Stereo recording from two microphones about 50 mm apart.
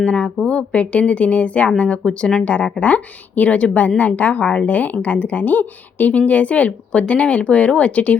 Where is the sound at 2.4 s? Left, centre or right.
Left.